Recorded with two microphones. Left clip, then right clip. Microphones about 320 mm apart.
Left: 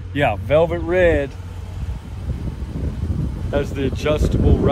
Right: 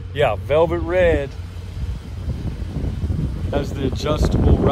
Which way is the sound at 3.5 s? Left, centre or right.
Centre.